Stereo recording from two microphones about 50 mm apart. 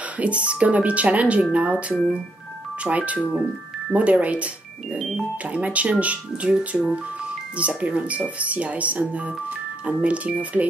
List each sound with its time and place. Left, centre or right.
0.2 s speech: right
4.9 s music: centre
5.5 s speech: right
7.5 s speech: right